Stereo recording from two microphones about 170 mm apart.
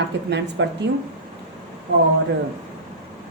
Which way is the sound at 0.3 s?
90° right.